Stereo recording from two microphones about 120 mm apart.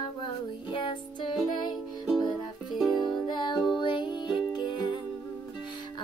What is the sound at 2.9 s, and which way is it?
Music, 40° left (ahead or behind).